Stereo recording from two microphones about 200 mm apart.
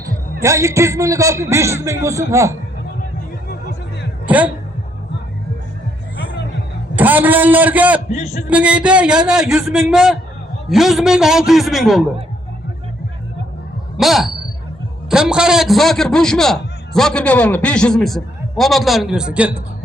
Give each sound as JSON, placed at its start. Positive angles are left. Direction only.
{"t": 0.0, "sound": "a man's voice", "side_deg": -15}
{"t": 4.3, "sound": "speech", "side_deg": -5}
{"t": 6.9, "sound": "a man's voice", "side_deg": -10}
{"t": 8.1, "sound": "a man's voice", "side_deg": 35}
{"t": 8.4, "sound": "a man's voice", "side_deg": -5}
{"t": 14.0, "sound": "a sound", "side_deg": 0}
{"t": 15.1, "sound": "a man's voice", "side_deg": -5}